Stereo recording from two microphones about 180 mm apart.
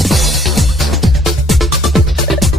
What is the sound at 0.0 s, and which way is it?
Music, centre (ahead or behind).